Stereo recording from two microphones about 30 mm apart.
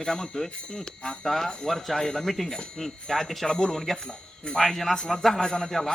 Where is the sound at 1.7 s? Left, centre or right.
Centre.